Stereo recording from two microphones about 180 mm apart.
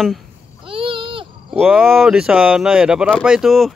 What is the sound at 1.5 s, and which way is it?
Speech, 5° right (ahead or behind).